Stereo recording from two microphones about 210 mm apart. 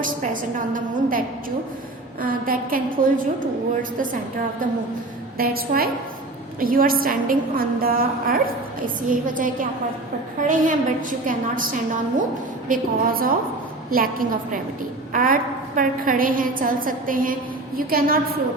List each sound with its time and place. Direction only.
0.7 s a woman's voice: 40° right (ahead or behind)
5.4 s a woman's voice: 45° right (ahead or behind)